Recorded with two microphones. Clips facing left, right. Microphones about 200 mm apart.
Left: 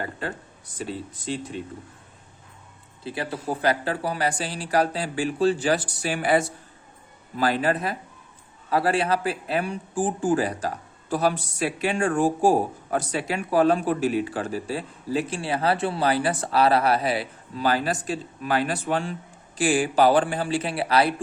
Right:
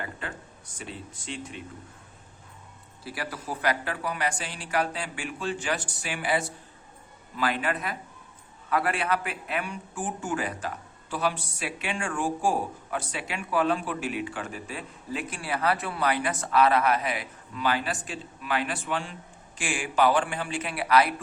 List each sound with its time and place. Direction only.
0.0 s speech: 35° left (ahead or behind)
3.0 s speech: 25° left (ahead or behind)